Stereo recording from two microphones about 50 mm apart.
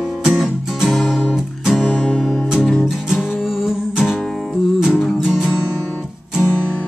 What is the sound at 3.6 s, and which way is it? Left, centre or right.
Music, centre.